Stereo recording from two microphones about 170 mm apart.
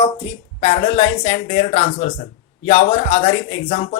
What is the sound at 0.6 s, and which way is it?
Speech, 35° left (ahead or behind).